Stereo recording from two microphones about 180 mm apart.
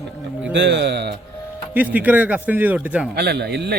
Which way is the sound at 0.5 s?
75° right (ahead or behind).